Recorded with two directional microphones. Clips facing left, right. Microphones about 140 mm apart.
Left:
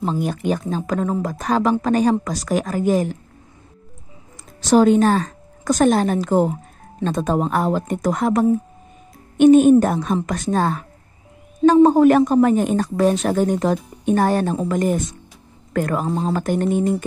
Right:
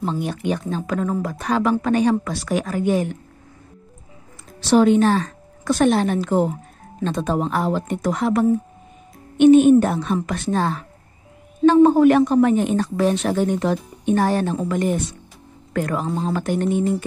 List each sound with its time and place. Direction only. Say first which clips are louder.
0.0 s a woman's voice: left 2 dB; 40° left (ahead or behind)
4.6 s a woman's voice: left 1 dB; 40° left (ahead or behind)